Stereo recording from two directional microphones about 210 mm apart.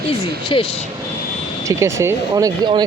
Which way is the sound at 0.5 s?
25° left (ahead or behind).